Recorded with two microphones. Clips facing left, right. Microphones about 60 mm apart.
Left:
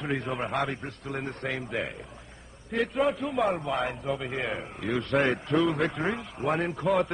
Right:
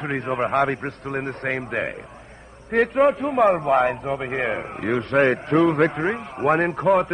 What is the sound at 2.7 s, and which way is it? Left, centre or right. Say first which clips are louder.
A man's voice: right 8 dB; right.